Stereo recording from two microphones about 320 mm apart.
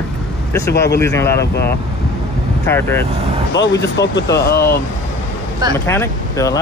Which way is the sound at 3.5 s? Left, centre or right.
Left.